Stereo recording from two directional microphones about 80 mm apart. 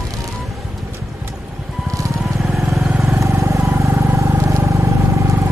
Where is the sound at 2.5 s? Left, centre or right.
Centre.